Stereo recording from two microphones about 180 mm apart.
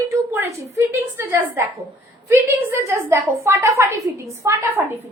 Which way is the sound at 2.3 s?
10° right (ahead or behind).